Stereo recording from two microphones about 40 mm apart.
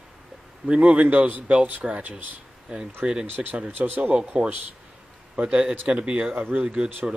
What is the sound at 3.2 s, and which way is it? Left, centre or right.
Speech, right.